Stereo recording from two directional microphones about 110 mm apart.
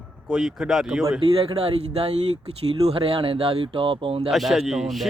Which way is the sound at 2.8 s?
60° right (ahead or behind).